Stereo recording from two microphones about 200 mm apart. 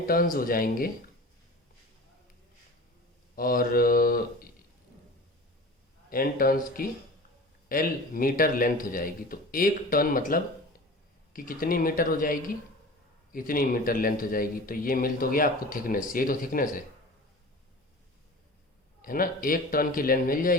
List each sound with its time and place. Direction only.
0.0 s speech: 45° left (ahead or behind)
3.3 s speech: 45° left (ahead or behind)
6.1 s speech: 45° left (ahead or behind)
19.0 s speech: 45° left (ahead or behind)